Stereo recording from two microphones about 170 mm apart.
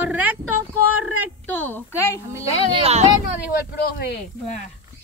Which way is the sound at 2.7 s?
35° right (ahead or behind).